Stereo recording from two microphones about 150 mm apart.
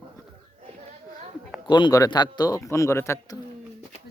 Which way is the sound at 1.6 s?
30° left (ahead or behind).